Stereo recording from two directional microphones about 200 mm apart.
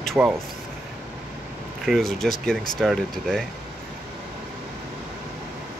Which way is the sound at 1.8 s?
Centre (ahead or behind).